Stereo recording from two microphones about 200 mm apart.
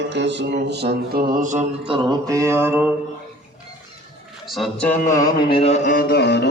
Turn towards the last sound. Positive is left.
turn(degrees=55)  # may be behind; listen again after turning